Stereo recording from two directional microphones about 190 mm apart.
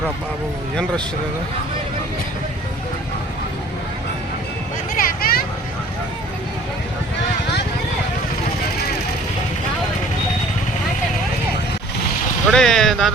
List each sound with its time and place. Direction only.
4.9 s vehicle: 50° left (ahead or behind)
12.5 s speech: 5° left (ahead or behind)